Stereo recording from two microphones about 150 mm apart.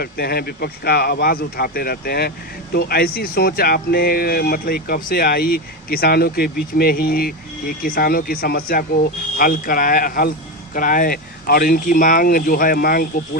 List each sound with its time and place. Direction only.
0.0 s speech: 90° left; by 13.2 s 75° left (ahead or behind)